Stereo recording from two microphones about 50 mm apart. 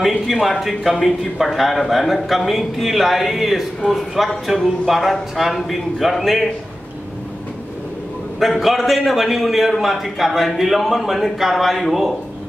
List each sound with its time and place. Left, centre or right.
0.3 s speech: centre
8.4 s speech: centre